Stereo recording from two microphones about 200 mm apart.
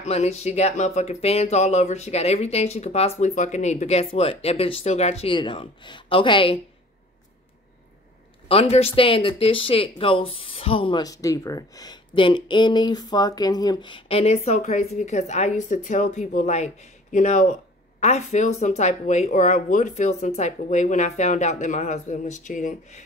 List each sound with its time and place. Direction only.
0.0 s speech: 35° left (ahead or behind)
8.5 s speech: 30° left (ahead or behind)